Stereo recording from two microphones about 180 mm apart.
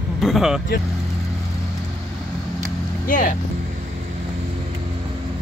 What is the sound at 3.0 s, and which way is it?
Speech, 50° left (ahead or behind).